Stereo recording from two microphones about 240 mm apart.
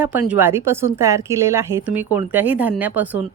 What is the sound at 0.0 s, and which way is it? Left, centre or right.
A woman's voice, centre.